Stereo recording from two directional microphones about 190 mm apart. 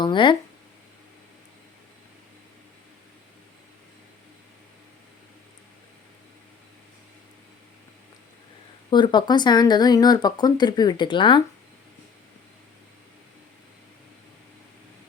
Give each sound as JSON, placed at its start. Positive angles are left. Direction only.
{"t": 0.0, "sound": "speech", "side_deg": 25}
{"t": 8.9, "sound": "speech", "side_deg": 25}